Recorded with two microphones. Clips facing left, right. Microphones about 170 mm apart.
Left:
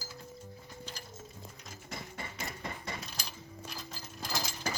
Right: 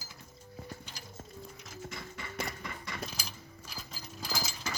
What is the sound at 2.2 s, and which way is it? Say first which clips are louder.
Music: right 4 dB; 35° left (ahead or behind).